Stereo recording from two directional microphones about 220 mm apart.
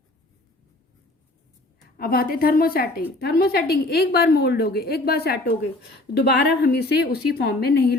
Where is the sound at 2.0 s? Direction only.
40° left (ahead or behind).